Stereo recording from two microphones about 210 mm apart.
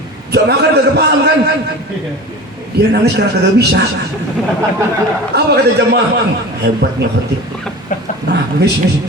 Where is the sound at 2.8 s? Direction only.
50° right (ahead or behind).